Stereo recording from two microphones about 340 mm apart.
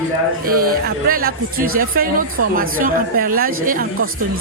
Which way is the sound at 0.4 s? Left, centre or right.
Right.